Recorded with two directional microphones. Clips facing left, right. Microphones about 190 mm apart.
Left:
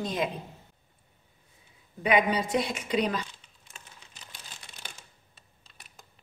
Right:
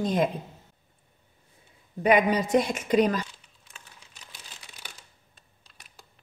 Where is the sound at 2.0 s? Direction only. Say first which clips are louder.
Right 3 dB; 45° right (ahead or behind).